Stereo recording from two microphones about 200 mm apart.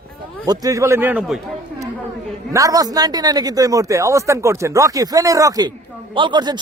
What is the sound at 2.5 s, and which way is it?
Speech, 15° right (ahead or behind).